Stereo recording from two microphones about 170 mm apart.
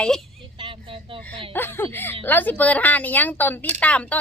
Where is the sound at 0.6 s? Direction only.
30° right (ahead or behind).